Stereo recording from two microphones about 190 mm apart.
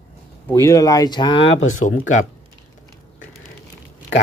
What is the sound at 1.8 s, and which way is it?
Speech, 40° left (ahead or behind).